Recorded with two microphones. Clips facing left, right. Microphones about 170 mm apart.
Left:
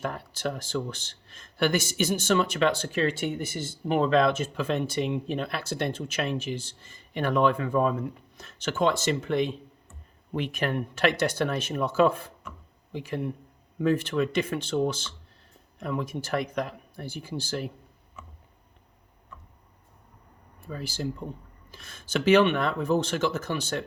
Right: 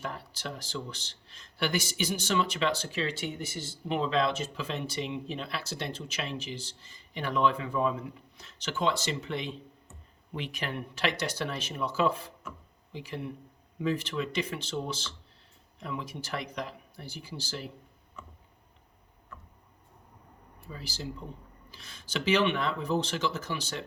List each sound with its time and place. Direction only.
0.0 s speech: 50° left (ahead or behind)
18.2 s a sound: 5° left (ahead or behind)
20.6 s speech: 50° left (ahead or behind)